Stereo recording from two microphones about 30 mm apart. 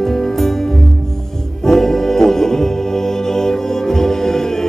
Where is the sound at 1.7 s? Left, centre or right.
Centre.